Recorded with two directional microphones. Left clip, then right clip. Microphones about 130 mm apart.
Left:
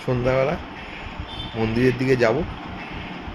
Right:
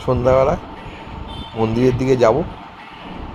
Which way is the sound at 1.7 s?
40° left (ahead or behind).